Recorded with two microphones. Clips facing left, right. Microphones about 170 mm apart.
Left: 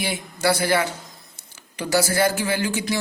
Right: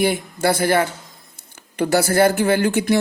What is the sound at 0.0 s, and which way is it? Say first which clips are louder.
Speech: right 5 dB; 50° right (ahead or behind).